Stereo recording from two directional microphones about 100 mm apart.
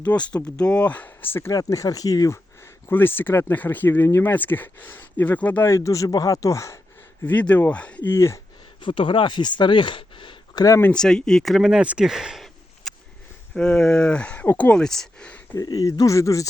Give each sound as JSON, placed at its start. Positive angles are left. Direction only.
{"t": 0.0, "sound": "speech", "side_deg": 15}
{"t": 0.3, "sound": "speech", "side_deg": 40}
{"t": 0.6, "sound": "speech", "side_deg": 10}
{"t": 1.5, "sound": "speech", "side_deg": 35}
{"t": 2.9, "sound": "speech", "side_deg": 20}
{"t": 7.3, "sound": "speech", "side_deg": 15}
{"t": 8.1, "sound": "speech", "side_deg": 25}
{"t": 8.8, "sound": "speech", "side_deg": 55}
{"t": 10.9, "sound": "speech", "side_deg": 5}
{"t": 15.5, "sound": "speech", "side_deg": 35}